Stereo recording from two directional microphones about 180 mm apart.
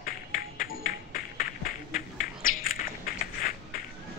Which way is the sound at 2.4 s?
50° left (ahead or behind).